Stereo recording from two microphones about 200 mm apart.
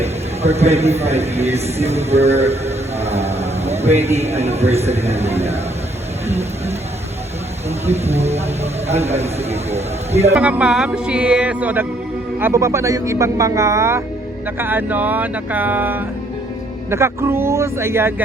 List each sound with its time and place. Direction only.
0.0 s speech: 30° right (ahead or behind)
7.9 s a man's voice: 30° right (ahead or behind)
10.3 s speech: 5° right (ahead or behind)